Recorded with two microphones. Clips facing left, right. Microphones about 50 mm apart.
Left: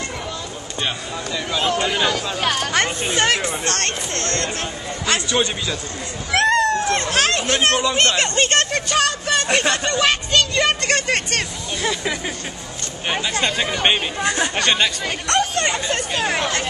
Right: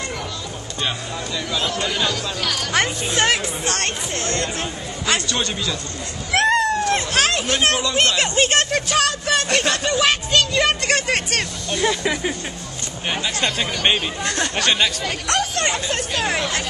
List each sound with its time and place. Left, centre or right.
0.8 s speech: centre
1.6 s speech: left
2.4 s speech: left
3.2 s speech: centre
6.3 s a sound: centre
6.9 s speech: centre